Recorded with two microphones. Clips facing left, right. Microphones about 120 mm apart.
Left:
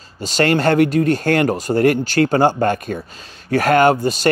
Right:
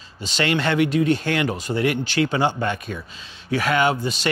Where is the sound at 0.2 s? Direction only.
45° left (ahead or behind).